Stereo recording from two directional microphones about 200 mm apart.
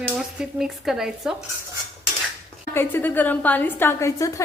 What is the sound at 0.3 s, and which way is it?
Speech, centre (ahead or behind).